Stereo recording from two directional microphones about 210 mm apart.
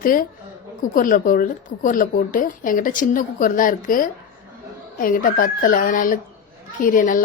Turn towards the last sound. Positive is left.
turn(degrees=40)  # may be behind; listen again after turning